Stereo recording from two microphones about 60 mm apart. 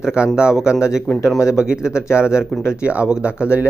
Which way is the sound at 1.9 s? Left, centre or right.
Left.